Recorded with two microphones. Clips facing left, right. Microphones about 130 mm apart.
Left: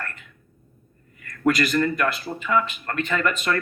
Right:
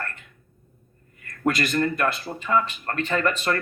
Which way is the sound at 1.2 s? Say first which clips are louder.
Left 3 dB; 45° right (ahead or behind).